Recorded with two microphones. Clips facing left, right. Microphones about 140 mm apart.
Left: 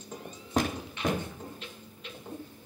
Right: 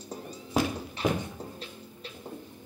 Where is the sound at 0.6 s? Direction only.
5° right (ahead or behind).